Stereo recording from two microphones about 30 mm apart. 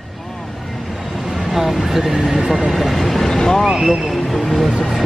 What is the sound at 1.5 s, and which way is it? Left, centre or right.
Speech, centre.